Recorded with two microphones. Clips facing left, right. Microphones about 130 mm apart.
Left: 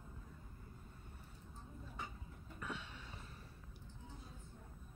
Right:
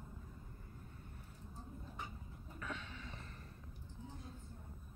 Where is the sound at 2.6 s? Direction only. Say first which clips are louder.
Right 1 dB; 5° left (ahead or behind).